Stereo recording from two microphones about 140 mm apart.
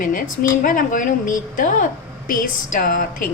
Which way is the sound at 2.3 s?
90° left.